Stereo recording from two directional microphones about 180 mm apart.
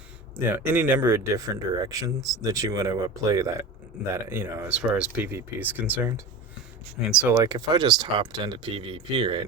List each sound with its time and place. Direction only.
0.4 s speech: 10° right (ahead or behind)
7.3 s speech: 20° right (ahead or behind)